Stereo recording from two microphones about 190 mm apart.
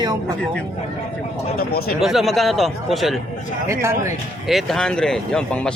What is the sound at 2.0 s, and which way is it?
Speech, centre (ahead or behind).